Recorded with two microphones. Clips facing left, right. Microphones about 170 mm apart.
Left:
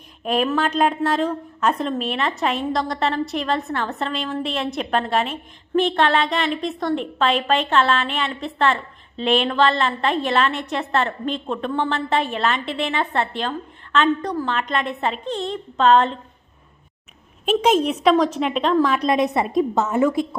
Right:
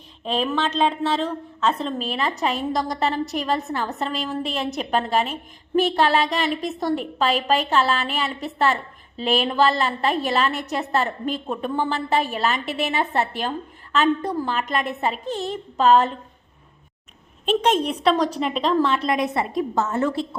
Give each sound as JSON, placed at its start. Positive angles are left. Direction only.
{"t": 0.5, "sound": "a woman's voice", "side_deg": 10}
{"t": 17.4, "sound": "a woman's voice", "side_deg": 5}
{"t": 18.9, "sound": "a woman's voice", "side_deg": 20}